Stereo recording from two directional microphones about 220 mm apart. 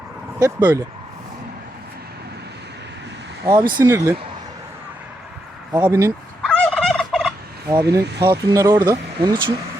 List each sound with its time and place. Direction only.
0.4 s speech: 15° right (ahead or behind)
3.5 s speech: 40° right (ahead or behind)
3.8 s speech: 15° right (ahead or behind)
5.7 s speech: 10° right (ahead or behind)
6.4 s gobble: 5° left (ahead or behind)
7.7 s speech: 15° right (ahead or behind)